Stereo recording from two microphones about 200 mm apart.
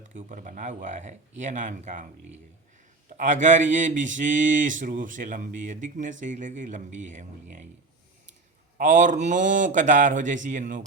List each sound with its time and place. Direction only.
0.1 s speech: 40° right (ahead or behind)
3.2 s speech: 40° right (ahead or behind)
8.8 s speech: 40° right (ahead or behind)